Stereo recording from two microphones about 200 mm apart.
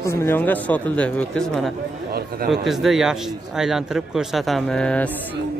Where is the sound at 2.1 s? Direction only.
50° right (ahead or behind).